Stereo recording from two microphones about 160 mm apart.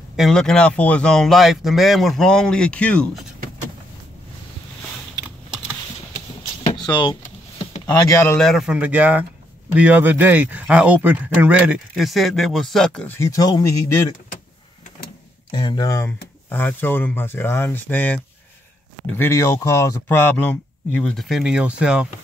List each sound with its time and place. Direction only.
0.1 s speech: centre (ahead or behind)
6.7 s a sound: 30° left (ahead or behind)
7.9 s speech: 20° left (ahead or behind)
8.4 s speech: centre (ahead or behind)
13.2 s speech: 20° left (ahead or behind)
15.5 s speech: 25° left (ahead or behind); by 22.0 s 5° right (ahead or behind)